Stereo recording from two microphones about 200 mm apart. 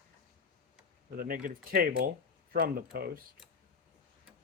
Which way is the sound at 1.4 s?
50° right (ahead or behind).